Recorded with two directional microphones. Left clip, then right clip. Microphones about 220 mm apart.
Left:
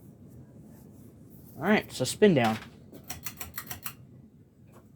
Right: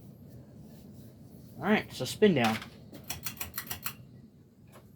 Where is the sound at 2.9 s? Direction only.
Centre (ahead or behind).